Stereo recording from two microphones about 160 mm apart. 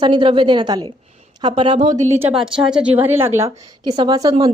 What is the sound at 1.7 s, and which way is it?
Speech, 50° right (ahead or behind).